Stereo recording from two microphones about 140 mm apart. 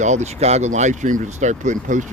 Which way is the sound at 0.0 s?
55° right (ahead or behind).